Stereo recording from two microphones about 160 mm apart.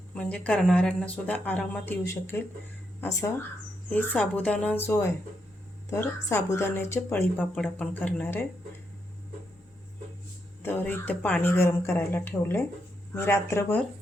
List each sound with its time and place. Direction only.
0.1 s a woman's voice: 5° left (ahead or behind)
10.6 s a woman's voice: 15° left (ahead or behind)